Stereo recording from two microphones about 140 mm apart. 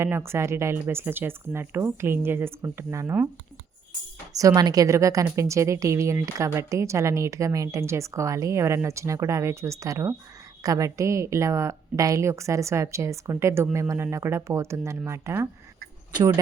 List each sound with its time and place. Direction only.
0.0 s speech: 20° right (ahead or behind)
4.4 s a woman's voice: 25° right (ahead or behind)
16.1 s speech: 30° right (ahead or behind)